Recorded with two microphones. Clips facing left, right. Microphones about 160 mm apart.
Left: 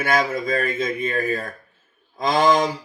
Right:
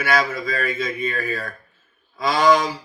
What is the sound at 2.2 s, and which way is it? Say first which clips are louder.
Speech: left 1 dB; 50° left (ahead or behind).